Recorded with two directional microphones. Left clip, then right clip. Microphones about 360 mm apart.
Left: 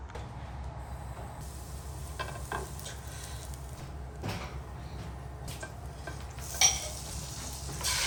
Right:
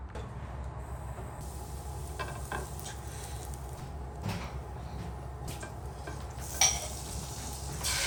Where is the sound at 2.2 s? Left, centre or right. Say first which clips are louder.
Left 1 dB; centre.